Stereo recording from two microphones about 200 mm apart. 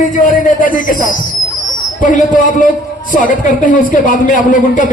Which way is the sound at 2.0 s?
40° left (ahead or behind).